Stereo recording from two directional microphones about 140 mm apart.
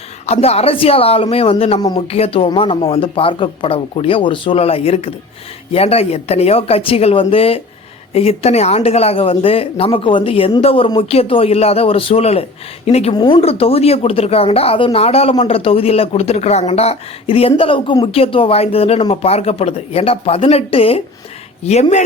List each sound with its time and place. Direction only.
0.3 s speech: 45° left (ahead or behind)